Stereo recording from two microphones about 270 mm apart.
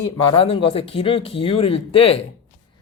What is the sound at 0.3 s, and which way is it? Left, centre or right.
Speech, left.